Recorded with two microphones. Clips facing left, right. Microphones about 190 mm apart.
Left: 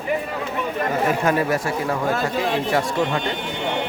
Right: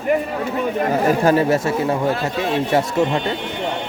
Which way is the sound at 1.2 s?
25° right (ahead or behind).